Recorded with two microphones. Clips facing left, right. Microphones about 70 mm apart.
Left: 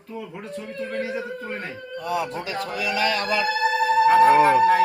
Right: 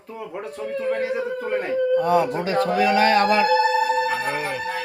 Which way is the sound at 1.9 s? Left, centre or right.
Right.